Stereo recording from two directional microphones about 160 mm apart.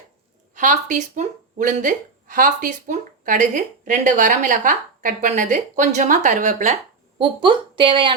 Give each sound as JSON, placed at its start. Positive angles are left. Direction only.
{"t": 0.5, "sound": "speech", "side_deg": -50}
{"t": 7.2, "sound": "a woman's voice", "side_deg": -30}